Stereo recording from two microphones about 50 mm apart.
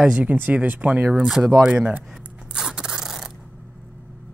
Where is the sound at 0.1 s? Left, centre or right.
Right.